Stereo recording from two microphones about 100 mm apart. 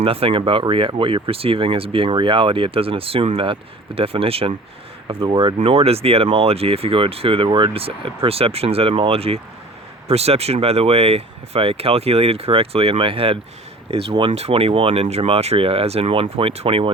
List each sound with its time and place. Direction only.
0.0 s speech: 70° right (ahead or behind)
10.1 s speech: 90° right; by 16.9 s 70° right (ahead or behind)